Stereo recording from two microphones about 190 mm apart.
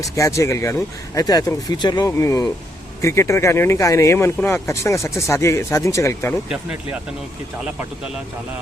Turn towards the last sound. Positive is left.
turn(degrees=-5)  # may be behind; listen again after turning